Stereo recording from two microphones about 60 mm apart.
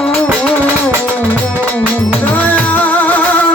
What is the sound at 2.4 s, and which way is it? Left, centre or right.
Music, left.